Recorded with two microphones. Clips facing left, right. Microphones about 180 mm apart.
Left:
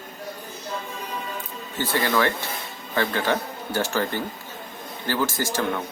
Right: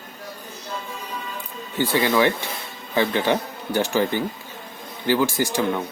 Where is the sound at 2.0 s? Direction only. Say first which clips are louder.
Right 3 dB; 15° right (ahead or behind).